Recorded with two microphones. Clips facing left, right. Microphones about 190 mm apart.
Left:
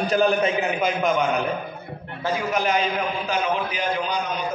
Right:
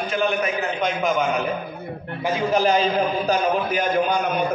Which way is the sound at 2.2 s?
25° right (ahead or behind).